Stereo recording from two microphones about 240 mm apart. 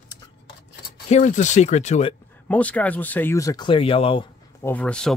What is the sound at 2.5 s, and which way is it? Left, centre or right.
Speech, centre.